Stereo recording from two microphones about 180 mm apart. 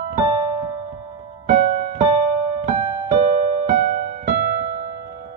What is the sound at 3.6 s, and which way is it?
Music, 40° right (ahead or behind).